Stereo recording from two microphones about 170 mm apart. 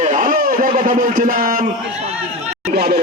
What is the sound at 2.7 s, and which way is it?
Speech, 70° right (ahead or behind).